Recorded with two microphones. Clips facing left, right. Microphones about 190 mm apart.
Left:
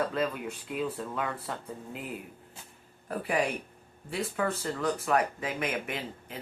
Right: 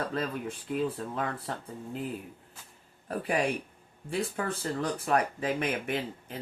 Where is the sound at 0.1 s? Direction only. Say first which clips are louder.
Left 1 dB; 40° right (ahead or behind).